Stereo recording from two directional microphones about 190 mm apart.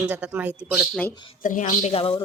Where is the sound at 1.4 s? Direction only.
40° left (ahead or behind).